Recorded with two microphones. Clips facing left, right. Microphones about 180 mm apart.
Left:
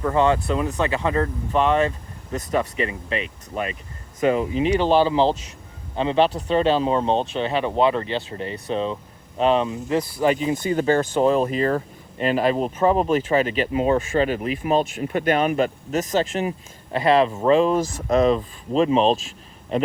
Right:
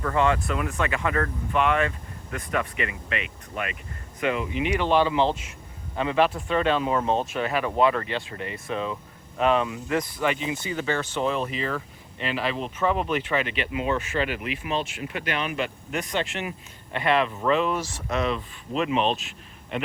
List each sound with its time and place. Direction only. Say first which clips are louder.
0.0 s speech: left 4 dB; 25° left (ahead or behind)